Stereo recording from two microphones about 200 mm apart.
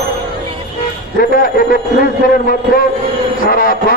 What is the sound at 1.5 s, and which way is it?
Speech, 45° left (ahead or behind).